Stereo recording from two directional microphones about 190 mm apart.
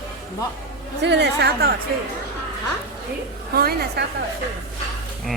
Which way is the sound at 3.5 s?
55° right (ahead or behind).